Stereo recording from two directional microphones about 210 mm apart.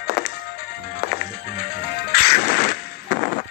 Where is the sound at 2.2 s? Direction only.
45° left (ahead or behind).